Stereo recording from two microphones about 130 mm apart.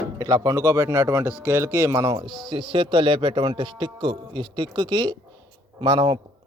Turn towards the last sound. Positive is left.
turn(degrees=-35)  # may be behind; listen again after turning